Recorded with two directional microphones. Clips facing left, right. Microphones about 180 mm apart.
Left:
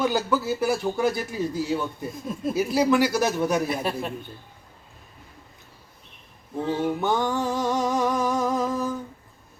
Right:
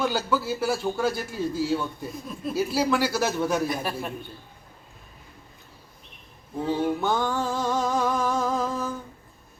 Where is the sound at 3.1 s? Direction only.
15° left (ahead or behind).